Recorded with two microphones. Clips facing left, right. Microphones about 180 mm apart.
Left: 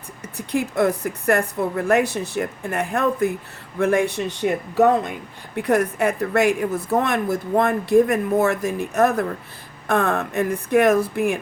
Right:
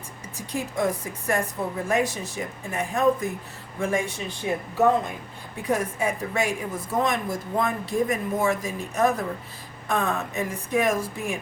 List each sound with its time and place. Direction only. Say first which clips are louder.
0.3 s a man's voice: left 7 dB; 65° left (ahead or behind)